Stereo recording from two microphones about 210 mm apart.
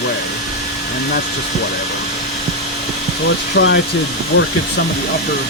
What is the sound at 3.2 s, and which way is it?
Speech, 60° left (ahead or behind).